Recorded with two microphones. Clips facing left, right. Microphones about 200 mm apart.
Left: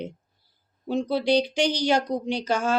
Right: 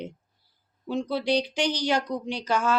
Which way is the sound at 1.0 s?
30° left (ahead or behind).